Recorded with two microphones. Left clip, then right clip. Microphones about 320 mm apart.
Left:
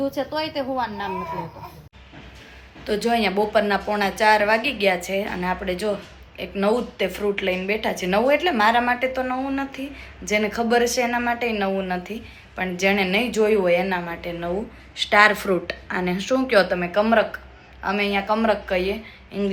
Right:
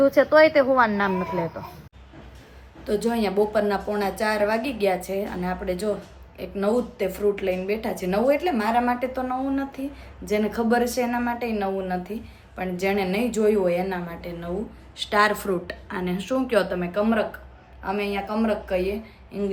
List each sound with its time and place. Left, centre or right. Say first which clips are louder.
0.0 s speech: right 10 dB; centre
2.8 s speech: left 3 dB; centre